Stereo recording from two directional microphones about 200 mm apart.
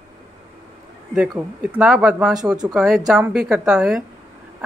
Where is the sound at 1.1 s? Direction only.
5° right (ahead or behind).